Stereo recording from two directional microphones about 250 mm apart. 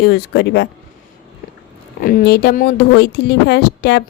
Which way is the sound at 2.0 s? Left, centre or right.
Left.